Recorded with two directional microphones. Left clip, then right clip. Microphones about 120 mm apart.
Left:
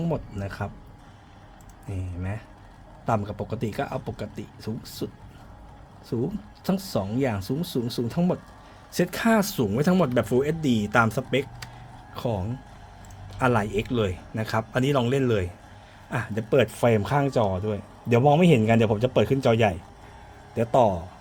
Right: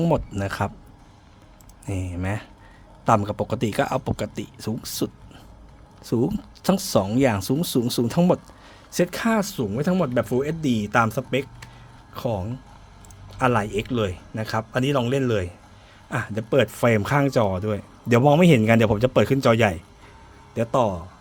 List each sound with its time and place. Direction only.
0.0 s speech: 75° right (ahead or behind)
1.9 s speech: 65° right (ahead or behind)
8.9 s speech: 25° right (ahead or behind)
9.4 s a man's voice: 5° left (ahead or behind); by 19.8 s 35° right (ahead or behind)
20.6 s speech: 20° right (ahead or behind)